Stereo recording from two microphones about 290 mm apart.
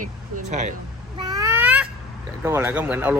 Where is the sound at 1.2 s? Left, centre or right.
Centre.